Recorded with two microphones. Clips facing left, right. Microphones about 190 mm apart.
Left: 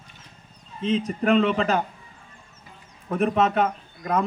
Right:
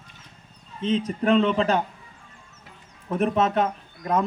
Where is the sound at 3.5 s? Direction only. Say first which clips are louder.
Left 1 dB; 5° left (ahead or behind).